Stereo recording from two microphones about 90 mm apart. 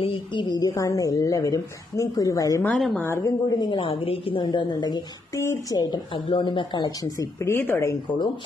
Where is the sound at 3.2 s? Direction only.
45° left (ahead or behind).